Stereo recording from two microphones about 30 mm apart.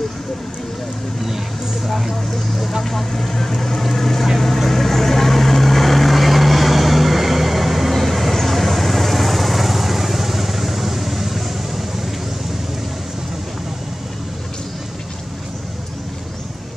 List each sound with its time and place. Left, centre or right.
1.9 s vehicle: centre
2.8 s vehicle: centre